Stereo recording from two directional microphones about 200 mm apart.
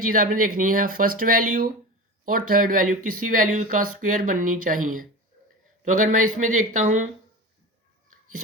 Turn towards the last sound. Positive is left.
turn(degrees=-40)  # may be behind; listen again after turning